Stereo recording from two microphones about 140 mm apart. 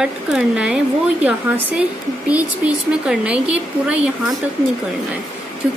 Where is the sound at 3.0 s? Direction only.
10° right (ahead or behind).